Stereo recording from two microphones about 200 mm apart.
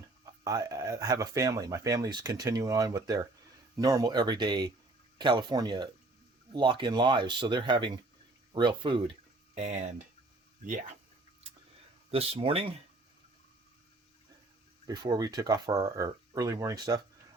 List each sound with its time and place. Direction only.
0.4 s speech: 15° right (ahead or behind)
12.1 s speech: 30° right (ahead or behind)
14.8 s speech: 20° right (ahead or behind)